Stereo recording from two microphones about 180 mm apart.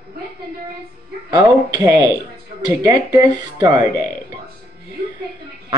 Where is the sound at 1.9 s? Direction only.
20° right (ahead or behind).